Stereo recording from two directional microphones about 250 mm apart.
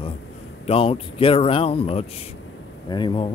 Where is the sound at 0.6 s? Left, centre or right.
Left.